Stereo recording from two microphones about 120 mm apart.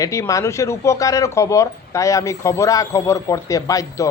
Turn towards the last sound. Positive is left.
turn(degrees=25)  # may be behind; listen again after turning